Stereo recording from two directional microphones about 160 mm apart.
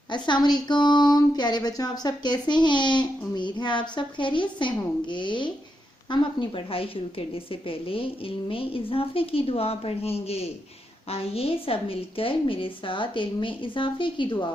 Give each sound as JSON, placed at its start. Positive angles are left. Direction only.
{"t": 0.1, "sound": "a woman's voice", "side_deg": 30}